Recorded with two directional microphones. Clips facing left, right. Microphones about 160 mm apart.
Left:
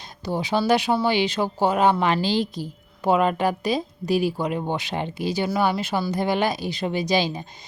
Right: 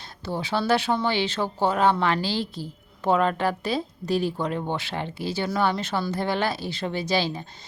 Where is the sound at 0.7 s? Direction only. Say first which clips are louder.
Left 2 dB; 15° left (ahead or behind).